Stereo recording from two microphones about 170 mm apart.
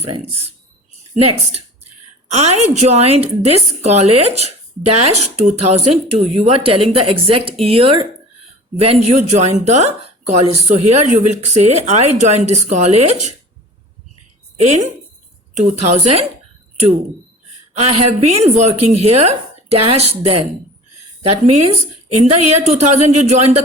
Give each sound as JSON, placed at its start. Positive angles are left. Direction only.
{"t": 0.0, "sound": "speech", "side_deg": -35}
{"t": 2.3, "sound": "speech", "side_deg": -40}
{"t": 15.5, "sound": "a woman's voice", "side_deg": -45}
{"t": 17.7, "sound": "speech", "side_deg": -40}